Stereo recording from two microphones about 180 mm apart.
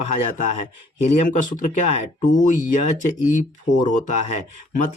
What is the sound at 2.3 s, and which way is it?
Speech, 45° left (ahead or behind).